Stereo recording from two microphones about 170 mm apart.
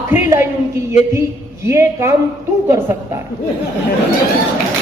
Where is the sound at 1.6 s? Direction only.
15° right (ahead or behind).